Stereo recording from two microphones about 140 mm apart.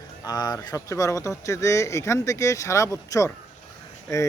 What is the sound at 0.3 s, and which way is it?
Speech, 30° left (ahead or behind).